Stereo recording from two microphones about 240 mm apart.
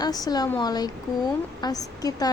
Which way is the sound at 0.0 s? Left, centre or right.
Centre.